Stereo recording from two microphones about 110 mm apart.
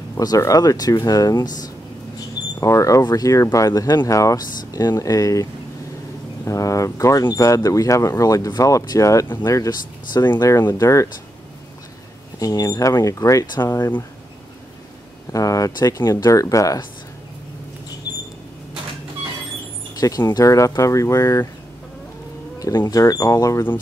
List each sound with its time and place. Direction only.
0.2 s speech: 35° left (ahead or behind)
12.4 s speech: 30° left (ahead or behind)
15.3 s speech: 30° left (ahead or behind)
20.0 s speech: 30° left (ahead or behind)
22.6 s speech: 30° left (ahead or behind)